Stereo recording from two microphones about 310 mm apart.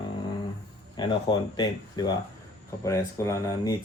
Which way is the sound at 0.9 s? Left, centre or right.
Centre.